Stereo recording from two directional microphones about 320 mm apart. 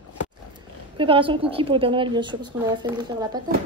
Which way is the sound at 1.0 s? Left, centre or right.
Centre.